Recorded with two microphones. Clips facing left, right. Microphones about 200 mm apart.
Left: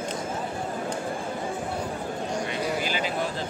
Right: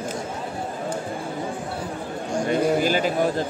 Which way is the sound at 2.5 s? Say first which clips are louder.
Right 8 dB; 45° right (ahead or behind).